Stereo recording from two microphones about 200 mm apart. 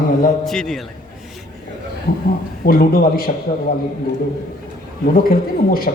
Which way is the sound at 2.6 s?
50° left (ahead or behind).